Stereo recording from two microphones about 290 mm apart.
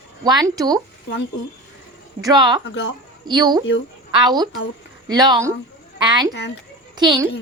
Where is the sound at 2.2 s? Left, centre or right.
Centre.